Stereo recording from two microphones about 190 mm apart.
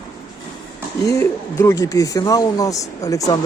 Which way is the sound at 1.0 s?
15° left (ahead or behind).